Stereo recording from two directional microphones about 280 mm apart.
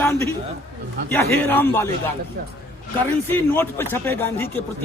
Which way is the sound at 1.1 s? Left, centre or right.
Centre.